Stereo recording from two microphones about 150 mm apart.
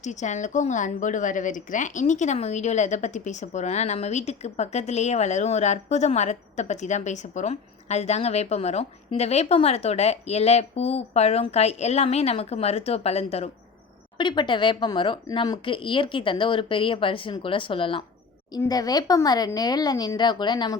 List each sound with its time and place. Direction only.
0.0 s speech: 50° left (ahead or behind)
14.2 s speech: 30° left (ahead or behind)
18.6 s speech: 25° left (ahead or behind)